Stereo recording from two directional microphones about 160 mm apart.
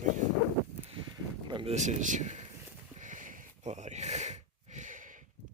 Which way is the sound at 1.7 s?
50° right (ahead or behind).